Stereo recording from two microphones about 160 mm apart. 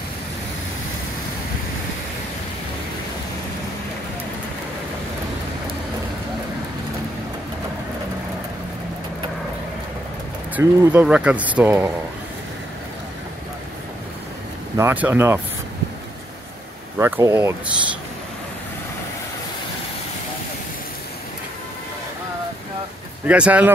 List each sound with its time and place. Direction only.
10.5 s speech: 15° right (ahead or behind)
14.8 s speech: 15° right (ahead or behind)
17.0 s speech: 15° right (ahead or behind)
23.2 s speech: 10° right (ahead or behind)